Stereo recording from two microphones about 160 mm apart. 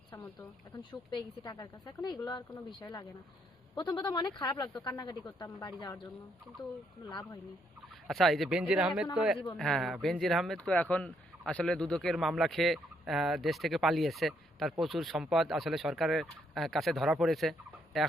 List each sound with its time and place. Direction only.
0.8 s speech: 25° left (ahead or behind)
7.1 s speech: 25° left (ahead or behind)
8.0 s speech: centre (ahead or behind)